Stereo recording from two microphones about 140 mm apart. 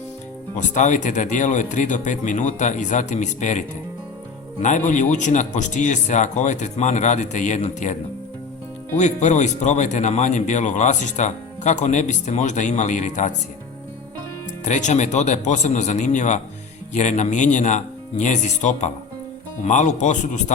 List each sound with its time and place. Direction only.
0.5 s a man's voice: 60° left (ahead or behind)
4.6 s a man's voice: 60° left (ahead or behind)
9.0 s a man's voice: 55° left (ahead or behind)
14.6 s a man's voice: 60° left (ahead or behind)